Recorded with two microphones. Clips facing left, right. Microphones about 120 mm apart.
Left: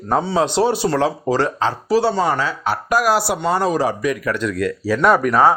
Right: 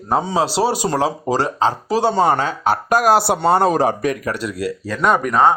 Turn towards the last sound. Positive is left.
turn(degrees=0)  # may be behind; listen again after turning